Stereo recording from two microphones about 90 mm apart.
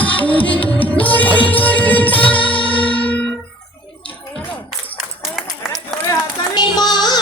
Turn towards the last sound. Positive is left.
turn(degrees=50)  # may be behind; listen again after turning